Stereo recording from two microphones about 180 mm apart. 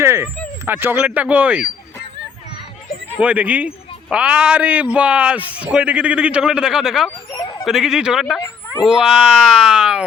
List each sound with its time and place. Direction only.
0.0 s speech: 15° right (ahead or behind)
3.2 s speech: 10° right (ahead or behind)
8.4 s a sound: 15° left (ahead or behind)
8.8 s speech: centre (ahead or behind)